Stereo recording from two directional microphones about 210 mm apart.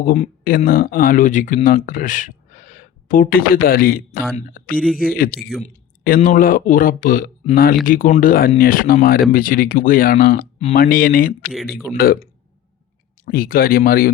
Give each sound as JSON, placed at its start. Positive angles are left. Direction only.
{"t": 0.0, "sound": "speech", "side_deg": 40}
{"t": 4.8, "sound": "speech", "side_deg": -5}
{"t": 5.6, "sound": "speech", "side_deg": 35}
{"t": 11.9, "sound": "speech", "side_deg": 0}
{"t": 13.2, "sound": "speech", "side_deg": 45}